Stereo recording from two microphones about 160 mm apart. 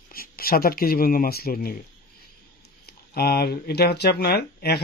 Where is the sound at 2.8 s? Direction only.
80° left.